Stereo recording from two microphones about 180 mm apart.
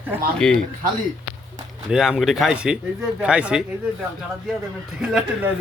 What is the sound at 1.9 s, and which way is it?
Speech, 5° right (ahead or behind).